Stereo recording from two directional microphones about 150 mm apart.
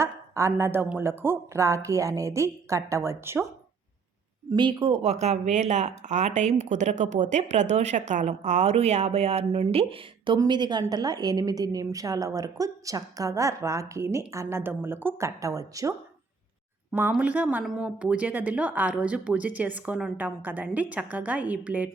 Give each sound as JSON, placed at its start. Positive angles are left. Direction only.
{"t": 0.0, "sound": "speech", "side_deg": -20}
{"t": 4.4, "sound": "speech", "side_deg": -30}
{"t": 5.2, "sound": "speech", "side_deg": -50}
{"t": 17.1, "sound": "speech", "side_deg": -10}